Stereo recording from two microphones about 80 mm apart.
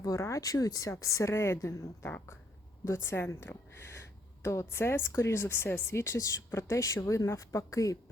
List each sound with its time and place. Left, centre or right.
0.0 s speech: left
2.0 s speech: left